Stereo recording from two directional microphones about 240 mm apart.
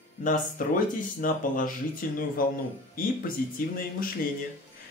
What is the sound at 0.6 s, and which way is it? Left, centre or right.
Speech, left.